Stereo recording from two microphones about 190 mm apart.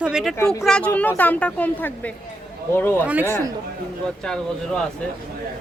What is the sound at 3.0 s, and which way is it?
Speech, 10° right (ahead or behind).